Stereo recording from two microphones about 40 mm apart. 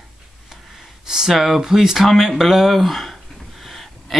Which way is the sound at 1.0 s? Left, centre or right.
Centre.